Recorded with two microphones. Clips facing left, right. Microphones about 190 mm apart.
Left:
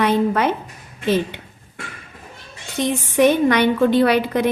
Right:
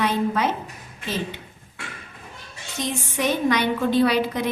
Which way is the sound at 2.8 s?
60° left (ahead or behind).